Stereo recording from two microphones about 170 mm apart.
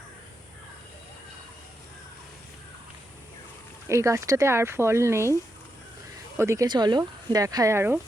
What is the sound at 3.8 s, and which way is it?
Speech, 15° right (ahead or behind).